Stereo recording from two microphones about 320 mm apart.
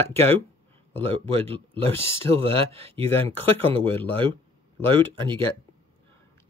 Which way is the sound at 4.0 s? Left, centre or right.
Centre.